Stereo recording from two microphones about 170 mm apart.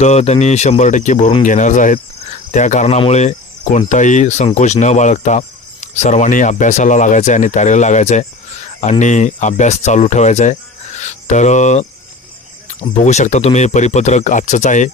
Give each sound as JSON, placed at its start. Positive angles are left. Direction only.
{"t": 0.0, "sound": "speech", "side_deg": 40}
{"t": 13.0, "sound": "speech", "side_deg": 45}